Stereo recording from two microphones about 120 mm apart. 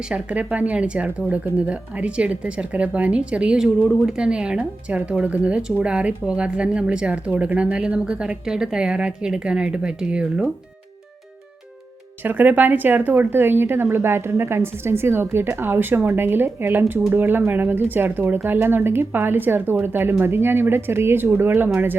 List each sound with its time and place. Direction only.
0.1 s speech: 10° right (ahead or behind)
12.2 s a woman's voice: 15° right (ahead or behind)